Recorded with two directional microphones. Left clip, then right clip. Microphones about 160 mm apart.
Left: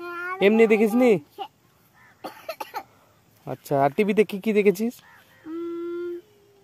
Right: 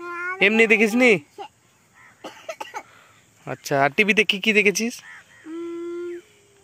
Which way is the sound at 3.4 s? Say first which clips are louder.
Right 1 dB; 10° left (ahead or behind).